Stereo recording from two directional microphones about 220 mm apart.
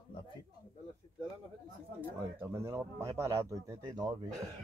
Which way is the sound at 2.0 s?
10° right (ahead or behind).